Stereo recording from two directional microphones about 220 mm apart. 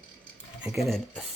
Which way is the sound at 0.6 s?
Centre (ahead or behind).